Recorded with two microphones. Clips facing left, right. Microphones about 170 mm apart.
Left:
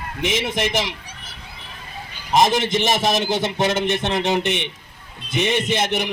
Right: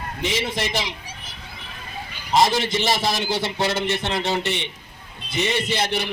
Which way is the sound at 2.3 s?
20° left (ahead or behind).